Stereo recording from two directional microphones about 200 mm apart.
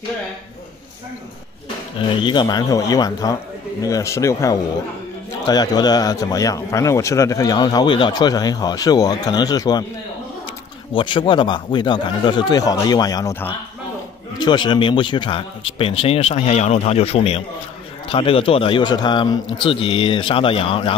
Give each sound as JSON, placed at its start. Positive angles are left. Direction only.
{"t": 2.0, "sound": "a man's voice", "side_deg": 25}
{"t": 10.9, "sound": "speech", "side_deg": 25}